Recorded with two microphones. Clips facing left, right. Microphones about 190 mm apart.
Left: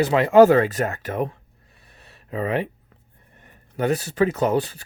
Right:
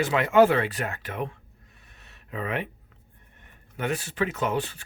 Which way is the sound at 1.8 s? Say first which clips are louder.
Left 7 dB; 35° left (ahead or behind).